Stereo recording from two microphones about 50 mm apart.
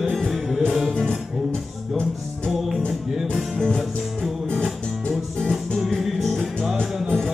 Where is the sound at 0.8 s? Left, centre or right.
Centre.